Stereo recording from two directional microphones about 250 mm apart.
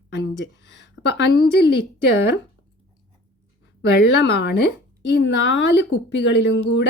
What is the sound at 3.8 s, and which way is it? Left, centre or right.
A woman's voice, left.